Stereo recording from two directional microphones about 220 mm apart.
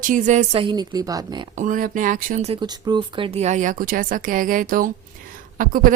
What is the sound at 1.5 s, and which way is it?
A woman's voice, 35° right (ahead or behind).